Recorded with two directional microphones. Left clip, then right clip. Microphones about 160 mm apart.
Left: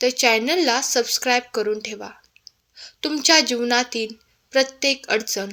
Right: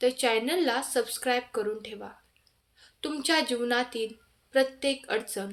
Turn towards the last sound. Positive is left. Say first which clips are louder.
# left 8 dB
turn(degrees=45)  # may be behind; listen again after turning